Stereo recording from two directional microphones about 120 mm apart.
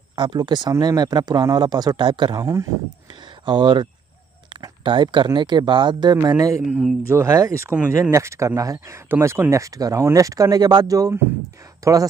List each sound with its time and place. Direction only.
0.1 s speech: 40° right (ahead or behind)
3.4 s speech: 40° right (ahead or behind)